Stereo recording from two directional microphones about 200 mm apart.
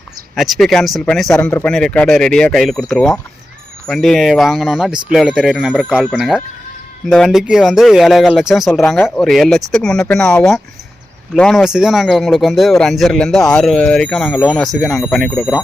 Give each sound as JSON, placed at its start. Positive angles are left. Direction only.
{"t": 0.3, "sound": "speech", "side_deg": 0}